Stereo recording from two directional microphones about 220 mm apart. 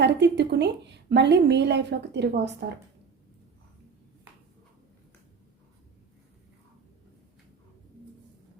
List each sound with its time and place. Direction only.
0.0 s a woman's voice: 50° right (ahead or behind)